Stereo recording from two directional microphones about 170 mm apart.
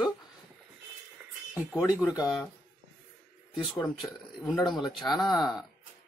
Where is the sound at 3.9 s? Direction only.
Centre (ahead or behind).